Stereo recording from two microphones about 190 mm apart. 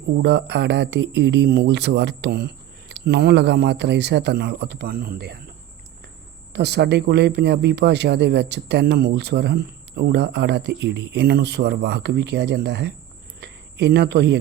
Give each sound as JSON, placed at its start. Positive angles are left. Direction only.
{"t": 0.2, "sound": "speech", "side_deg": -65}
{"t": 6.5, "sound": "speech", "side_deg": -60}